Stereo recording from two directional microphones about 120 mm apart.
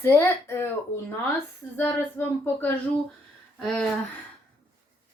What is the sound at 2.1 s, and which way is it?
Speech, 15° left (ahead or behind).